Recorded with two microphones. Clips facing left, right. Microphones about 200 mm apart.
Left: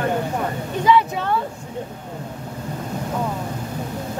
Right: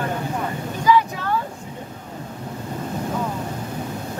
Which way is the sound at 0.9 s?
25° left (ahead or behind).